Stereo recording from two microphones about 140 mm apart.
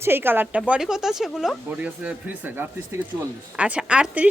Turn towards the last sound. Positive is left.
turn(degrees=-10)  # may be behind; listen again after turning